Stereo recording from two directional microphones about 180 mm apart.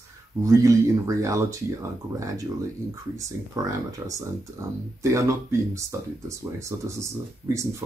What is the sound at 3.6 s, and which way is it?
Speech, 20° right (ahead or behind).